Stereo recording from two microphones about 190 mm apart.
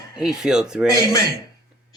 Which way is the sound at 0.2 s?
5° right (ahead or behind).